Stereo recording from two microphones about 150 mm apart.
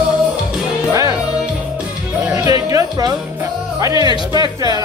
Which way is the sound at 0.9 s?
20° right (ahead or behind).